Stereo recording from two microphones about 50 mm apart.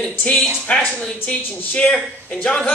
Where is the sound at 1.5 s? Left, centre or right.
Left.